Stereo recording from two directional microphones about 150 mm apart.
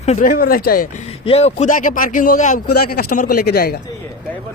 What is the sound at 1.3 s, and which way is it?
Speech, 45° left (ahead or behind).